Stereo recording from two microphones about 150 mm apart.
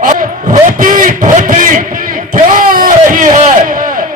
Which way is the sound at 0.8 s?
65° right (ahead or behind).